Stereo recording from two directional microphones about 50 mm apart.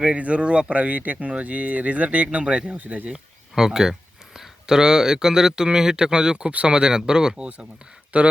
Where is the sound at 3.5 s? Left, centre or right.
Centre.